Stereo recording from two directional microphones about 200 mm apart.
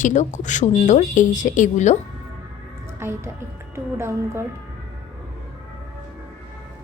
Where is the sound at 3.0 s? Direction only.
10° right (ahead or behind).